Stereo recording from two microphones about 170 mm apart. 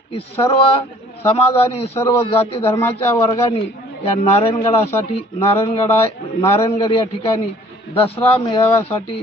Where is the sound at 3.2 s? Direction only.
30° left (ahead or behind).